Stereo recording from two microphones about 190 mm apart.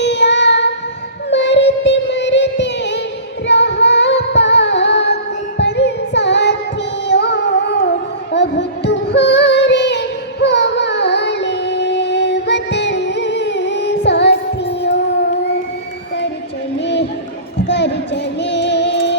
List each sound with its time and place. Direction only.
0.0 s child singing: 65° left (ahead or behind)
3.4 s music: 65° left (ahead or behind)
16.8 s a sound: 65° left (ahead or behind)
17.7 s music: 65° left (ahead or behind)